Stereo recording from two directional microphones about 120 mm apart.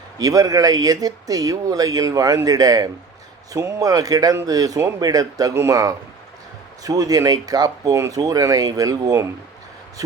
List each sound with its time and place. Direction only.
0.2 s speech: 30° right (ahead or behind)